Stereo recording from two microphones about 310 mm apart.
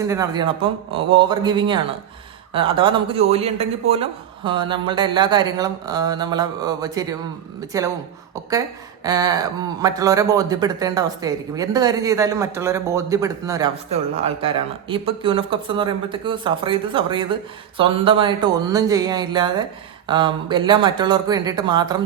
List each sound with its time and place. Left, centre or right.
0.0 s speech: centre
9.0 s speech: centre